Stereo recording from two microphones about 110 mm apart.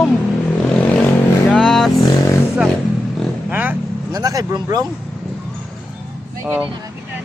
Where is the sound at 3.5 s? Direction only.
15° right (ahead or behind).